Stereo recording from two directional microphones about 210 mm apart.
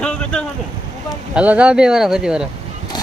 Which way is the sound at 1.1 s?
5° right (ahead or behind).